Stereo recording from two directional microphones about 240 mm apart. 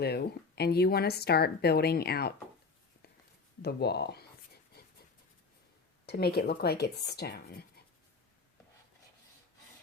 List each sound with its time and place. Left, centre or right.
0.0 s a woman's voice: left
3.6 s a woman's voice: left
6.1 s a woman's voice: left